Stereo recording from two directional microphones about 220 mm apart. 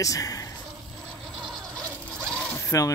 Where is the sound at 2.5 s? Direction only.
15° left (ahead or behind).